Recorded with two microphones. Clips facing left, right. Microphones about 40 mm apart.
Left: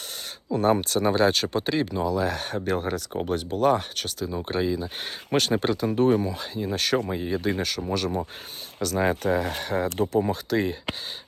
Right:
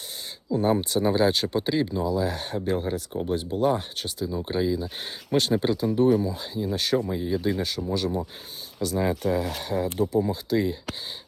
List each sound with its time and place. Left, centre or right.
0.5 s speech: left
2.9 s speech: left
4.6 s speech: left
4.9 s speech: left
7.1 s speech: left
9.0 s speech: left